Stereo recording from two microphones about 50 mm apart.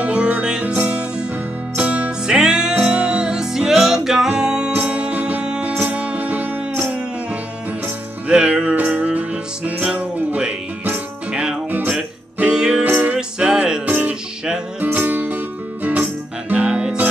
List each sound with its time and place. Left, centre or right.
0.0 s music: right
1.8 s music: right
2.2 s music: centre
2.9 s music: right
8.3 s music: centre
12.4 s music: centre
13.8 s music: right